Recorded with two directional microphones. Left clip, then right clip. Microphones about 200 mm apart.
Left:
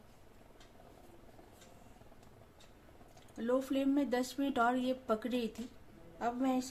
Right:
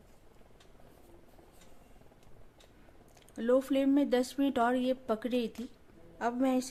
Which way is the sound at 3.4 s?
35° right (ahead or behind).